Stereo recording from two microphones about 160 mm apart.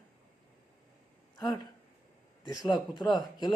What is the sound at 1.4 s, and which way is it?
Speech, 25° left (ahead or behind).